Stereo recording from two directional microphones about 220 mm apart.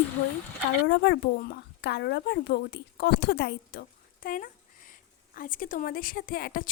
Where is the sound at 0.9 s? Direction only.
50° left (ahead or behind).